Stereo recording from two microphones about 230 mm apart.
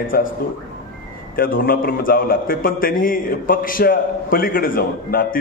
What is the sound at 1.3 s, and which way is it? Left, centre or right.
A man's voice, left.